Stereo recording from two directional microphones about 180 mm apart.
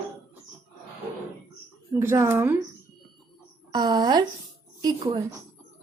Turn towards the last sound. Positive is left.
turn(degrees=-25)  # may be behind; listen again after turning